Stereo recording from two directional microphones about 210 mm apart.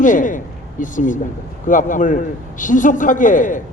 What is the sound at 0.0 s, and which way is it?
A man's voice, 40° left (ahead or behind).